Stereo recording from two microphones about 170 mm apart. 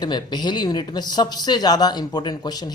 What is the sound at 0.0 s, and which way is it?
A man's voice, 25° left (ahead or behind).